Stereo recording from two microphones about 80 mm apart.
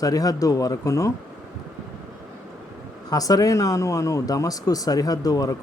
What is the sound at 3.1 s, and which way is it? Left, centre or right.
Speech, left.